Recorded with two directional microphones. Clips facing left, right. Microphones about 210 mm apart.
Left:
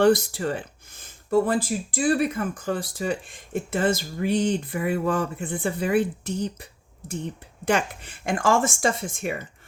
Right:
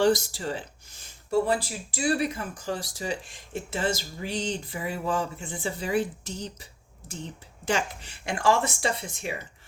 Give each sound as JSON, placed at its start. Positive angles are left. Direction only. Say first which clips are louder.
{"t": 0.0, "sound": "speech", "louder": "left 4 dB", "side_deg": 55}